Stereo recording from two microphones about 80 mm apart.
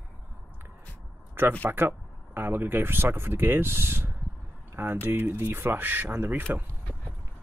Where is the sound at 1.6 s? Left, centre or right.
Right.